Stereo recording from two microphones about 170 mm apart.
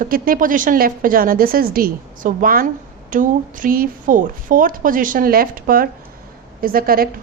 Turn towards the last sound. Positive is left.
turn(degrees=-60)  # may be behind; listen again after turning